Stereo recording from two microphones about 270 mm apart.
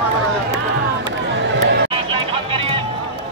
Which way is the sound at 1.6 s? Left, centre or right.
Right.